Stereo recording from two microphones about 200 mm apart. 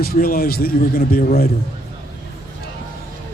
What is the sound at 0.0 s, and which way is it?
Speech, 45° left (ahead or behind).